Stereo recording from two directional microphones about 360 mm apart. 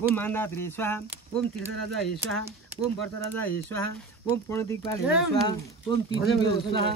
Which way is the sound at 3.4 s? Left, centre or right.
Centre.